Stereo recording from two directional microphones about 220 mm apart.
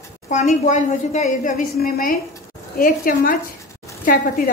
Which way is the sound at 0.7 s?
35° left (ahead or behind).